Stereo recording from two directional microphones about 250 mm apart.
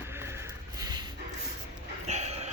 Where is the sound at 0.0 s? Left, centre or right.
Centre.